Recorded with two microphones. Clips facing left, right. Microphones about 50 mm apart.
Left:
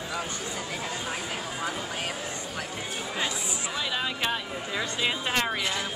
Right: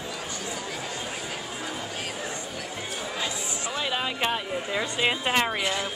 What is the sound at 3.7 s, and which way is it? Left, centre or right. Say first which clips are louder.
A woman's voice: right 2 dB; centre.